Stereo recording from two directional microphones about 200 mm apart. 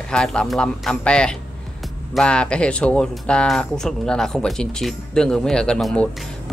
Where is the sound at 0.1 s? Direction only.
5° left (ahead or behind).